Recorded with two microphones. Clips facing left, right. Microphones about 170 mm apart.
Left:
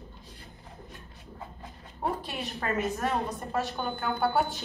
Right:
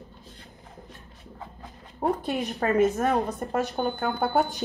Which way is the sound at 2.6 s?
35° right (ahead or behind).